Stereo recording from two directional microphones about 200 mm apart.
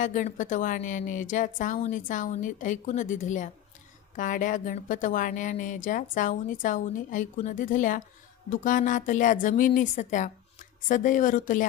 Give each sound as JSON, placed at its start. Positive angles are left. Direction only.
{"t": 0.0, "sound": "a woman's voice", "side_deg": 40}